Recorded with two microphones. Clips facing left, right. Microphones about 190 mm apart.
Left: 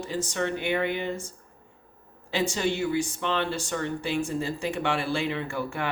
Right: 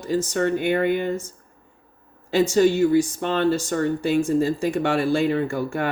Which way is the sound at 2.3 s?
45° right (ahead or behind).